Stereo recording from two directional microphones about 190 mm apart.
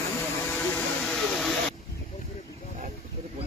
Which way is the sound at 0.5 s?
5° left (ahead or behind).